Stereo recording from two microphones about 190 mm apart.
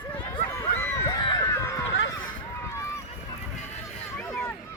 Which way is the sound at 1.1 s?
25° left (ahead or behind).